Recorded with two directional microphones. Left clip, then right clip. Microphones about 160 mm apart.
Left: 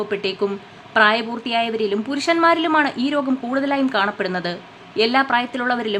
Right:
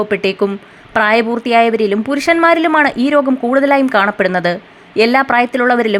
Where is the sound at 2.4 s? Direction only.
30° right (ahead or behind).